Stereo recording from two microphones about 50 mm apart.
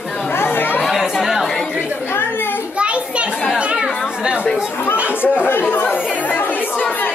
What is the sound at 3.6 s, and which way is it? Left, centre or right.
Chatter, right.